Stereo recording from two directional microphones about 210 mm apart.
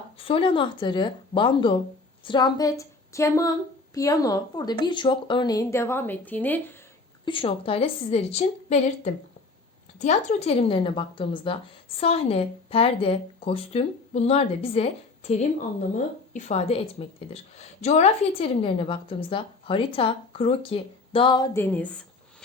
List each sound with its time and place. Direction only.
0.2 s a woman's voice: 25° left (ahead or behind); by 6.7 s 10° left (ahead or behind)
7.3 s a woman's voice: 25° left (ahead or behind); by 21.8 s 10° left (ahead or behind)